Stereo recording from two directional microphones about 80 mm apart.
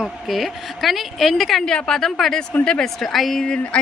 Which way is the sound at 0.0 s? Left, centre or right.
Centre.